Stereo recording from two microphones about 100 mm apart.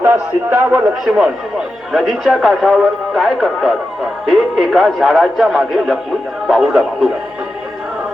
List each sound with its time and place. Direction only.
0.0 s speech: 20° right (ahead or behind)
1.0 s speech: 5° right (ahead or behind)